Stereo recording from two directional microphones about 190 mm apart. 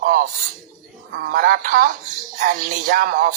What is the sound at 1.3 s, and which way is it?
Speech, 45° right (ahead or behind).